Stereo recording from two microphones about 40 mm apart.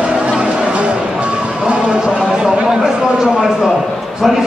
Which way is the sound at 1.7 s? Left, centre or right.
Right.